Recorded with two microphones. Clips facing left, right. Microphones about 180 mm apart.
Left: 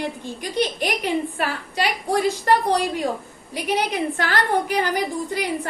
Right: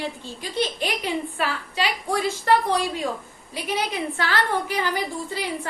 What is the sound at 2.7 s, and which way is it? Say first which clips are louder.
Speech: left 3 dB; 15° left (ahead or behind).